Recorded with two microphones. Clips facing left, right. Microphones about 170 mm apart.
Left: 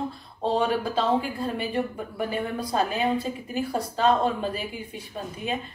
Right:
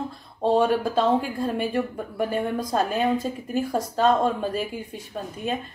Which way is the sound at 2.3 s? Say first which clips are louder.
Right 1 dB; 45° right (ahead or behind).